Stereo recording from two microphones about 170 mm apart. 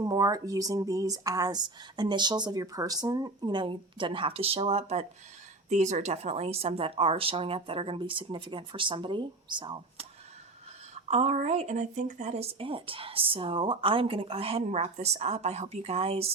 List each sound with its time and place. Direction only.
0.0 s speech: 20° right (ahead or behind)
10.9 s speech: 45° right (ahead or behind)